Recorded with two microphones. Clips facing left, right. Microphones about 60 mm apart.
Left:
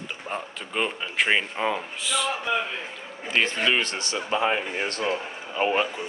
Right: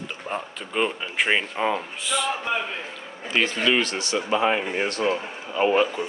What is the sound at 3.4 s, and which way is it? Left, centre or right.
Speech, left.